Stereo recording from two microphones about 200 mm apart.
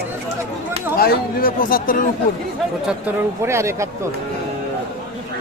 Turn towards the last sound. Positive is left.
turn(degrees=-15)  # may be behind; listen again after turning